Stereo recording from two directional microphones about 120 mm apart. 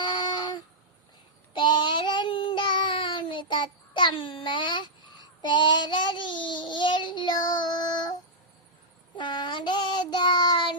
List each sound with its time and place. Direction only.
0.0 s a sound: 40° left (ahead or behind)
1.5 s child singing: 40° left (ahead or behind)
9.1 s child singing: 40° left (ahead or behind)